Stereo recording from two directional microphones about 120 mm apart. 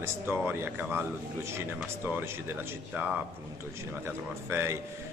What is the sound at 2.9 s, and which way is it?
Speech, 5° right (ahead or behind).